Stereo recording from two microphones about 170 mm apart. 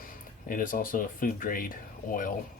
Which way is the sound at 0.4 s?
55° left (ahead or behind).